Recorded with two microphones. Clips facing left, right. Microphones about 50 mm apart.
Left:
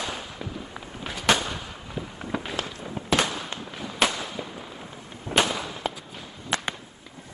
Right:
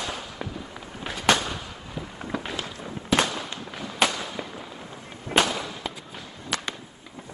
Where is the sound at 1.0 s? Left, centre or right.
Centre.